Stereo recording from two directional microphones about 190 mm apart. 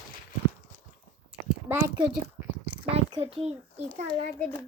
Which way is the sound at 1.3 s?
5° right (ahead or behind).